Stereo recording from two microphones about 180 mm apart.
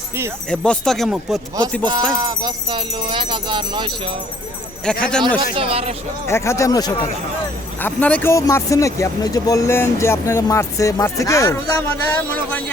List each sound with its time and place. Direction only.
0.5 s speech: 5° left (ahead or behind)
1.8 s speech: 25° right (ahead or behind)
4.9 s speech: 5° left (ahead or behind)
5.5 s speech: 30° right (ahead or behind)
6.2 s speech: 15° left (ahead or behind)
7.8 s speech: 10° left (ahead or behind)